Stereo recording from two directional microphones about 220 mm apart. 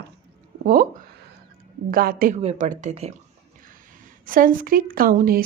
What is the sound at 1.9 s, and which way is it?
Speech, 40° right (ahead or behind).